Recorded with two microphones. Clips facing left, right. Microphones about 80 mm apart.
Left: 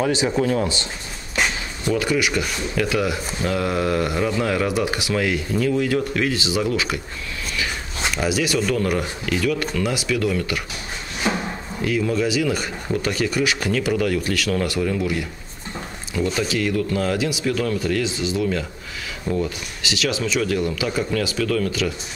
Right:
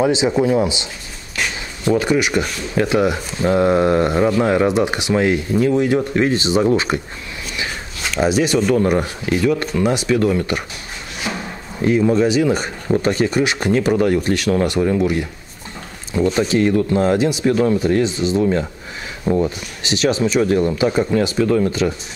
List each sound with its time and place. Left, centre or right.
0.0 s speech: centre
1.9 s speech: right
8.2 s speech: right
11.8 s speech: right
16.3 s speech: right